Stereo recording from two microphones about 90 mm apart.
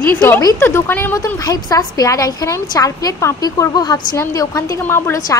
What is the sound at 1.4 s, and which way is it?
A woman's voice, 40° left (ahead or behind).